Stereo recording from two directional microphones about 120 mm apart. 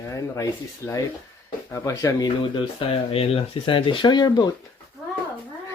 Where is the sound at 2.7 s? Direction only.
50° left (ahead or behind); by 4.5 s 35° left (ahead or behind).